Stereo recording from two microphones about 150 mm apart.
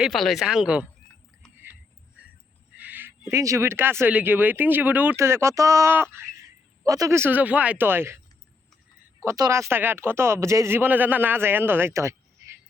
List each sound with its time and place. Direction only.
0.0 s speech: centre (ahead or behind)
2.7 s speech: 10° right (ahead or behind)
9.2 s speech: 20° right (ahead or behind)